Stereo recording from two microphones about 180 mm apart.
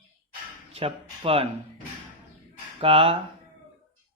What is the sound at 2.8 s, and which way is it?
Mantra, 30° right (ahead or behind).